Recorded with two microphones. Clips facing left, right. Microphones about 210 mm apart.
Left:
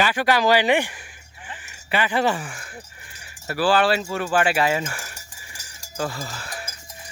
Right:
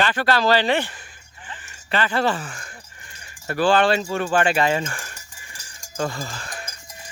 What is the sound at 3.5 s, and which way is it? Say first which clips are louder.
Speech: right 1 dB; 5° left (ahead or behind).